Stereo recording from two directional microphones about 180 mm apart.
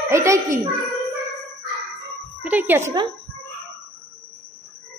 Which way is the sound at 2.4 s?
10° right (ahead or behind).